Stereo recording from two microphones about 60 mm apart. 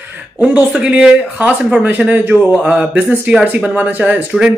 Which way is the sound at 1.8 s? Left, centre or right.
Right.